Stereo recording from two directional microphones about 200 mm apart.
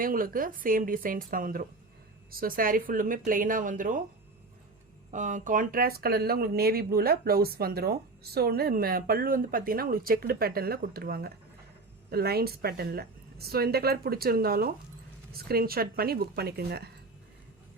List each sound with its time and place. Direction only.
0.0 s speech: 45° right (ahead or behind)
5.1 s speech: 40° right (ahead or behind); by 16.9 s 55° right (ahead or behind)